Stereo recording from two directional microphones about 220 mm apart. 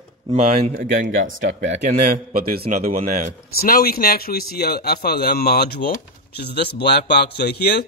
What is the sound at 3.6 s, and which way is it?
A man's voice, 45° left (ahead or behind).